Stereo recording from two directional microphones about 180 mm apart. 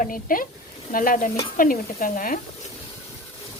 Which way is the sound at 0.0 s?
50° left (ahead or behind).